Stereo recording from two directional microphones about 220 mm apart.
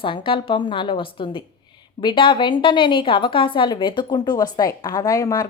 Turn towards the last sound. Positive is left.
turn(degrees=15)  # may be behind; listen again after turning